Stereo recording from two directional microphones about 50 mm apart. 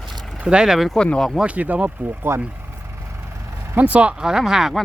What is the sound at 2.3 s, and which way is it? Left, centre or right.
Speech, right.